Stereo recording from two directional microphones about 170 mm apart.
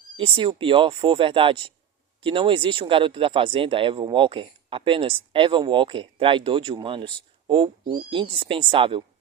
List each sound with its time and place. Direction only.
0.2 s speech: 30° right (ahead or behind)